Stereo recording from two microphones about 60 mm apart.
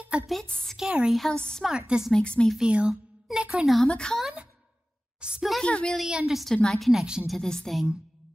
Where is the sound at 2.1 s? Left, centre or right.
Centre.